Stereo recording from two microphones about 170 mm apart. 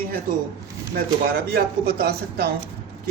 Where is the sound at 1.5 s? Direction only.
65° right (ahead or behind).